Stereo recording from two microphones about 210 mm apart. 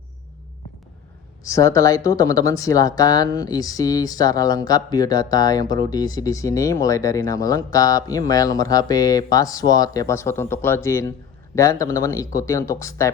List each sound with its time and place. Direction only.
1.5 s speech: 15° left (ahead or behind)